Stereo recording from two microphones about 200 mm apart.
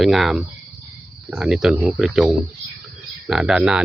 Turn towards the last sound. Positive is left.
turn(degrees=-5)  # may be behind; listen again after turning